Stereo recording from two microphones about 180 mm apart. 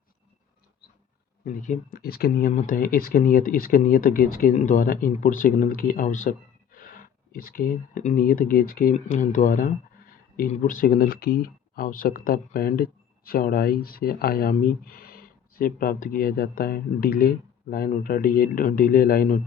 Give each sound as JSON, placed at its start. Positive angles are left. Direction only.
{"t": 1.5, "sound": "speech", "side_deg": 45}
{"t": 2.5, "sound": "speech", "side_deg": 45}